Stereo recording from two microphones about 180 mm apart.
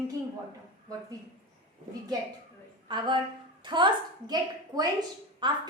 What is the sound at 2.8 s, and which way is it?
A woman's voice, 25° right (ahead or behind).